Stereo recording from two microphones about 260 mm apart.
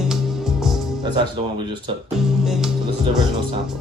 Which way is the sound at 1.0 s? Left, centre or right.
Centre.